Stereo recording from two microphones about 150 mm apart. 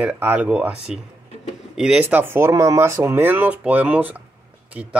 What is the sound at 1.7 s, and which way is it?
Speech, 5° right (ahead or behind).